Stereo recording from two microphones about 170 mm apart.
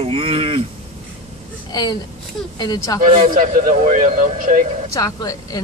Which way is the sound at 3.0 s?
55° right (ahead or behind).